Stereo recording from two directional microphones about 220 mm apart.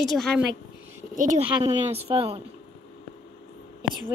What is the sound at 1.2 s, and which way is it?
Speech, 35° right (ahead or behind).